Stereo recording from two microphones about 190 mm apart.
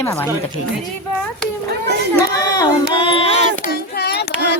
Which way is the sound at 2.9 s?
25° left (ahead or behind).